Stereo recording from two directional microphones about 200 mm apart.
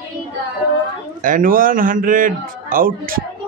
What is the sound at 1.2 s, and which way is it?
Speech, 45° right (ahead or behind).